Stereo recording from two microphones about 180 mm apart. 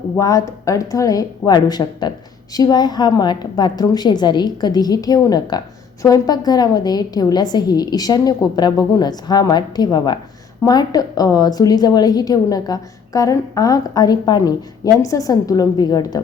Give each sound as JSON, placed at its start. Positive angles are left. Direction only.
{"t": 0.2, "sound": "speech", "side_deg": 20}